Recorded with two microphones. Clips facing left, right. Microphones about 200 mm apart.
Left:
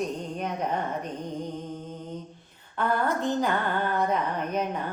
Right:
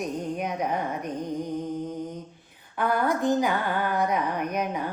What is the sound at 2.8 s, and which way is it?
A woman's voice, 10° right (ahead or behind).